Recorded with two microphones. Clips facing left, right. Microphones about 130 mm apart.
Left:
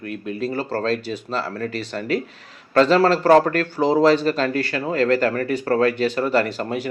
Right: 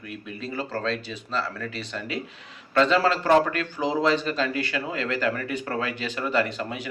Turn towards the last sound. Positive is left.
turn(degrees=40)  # may be behind; listen again after turning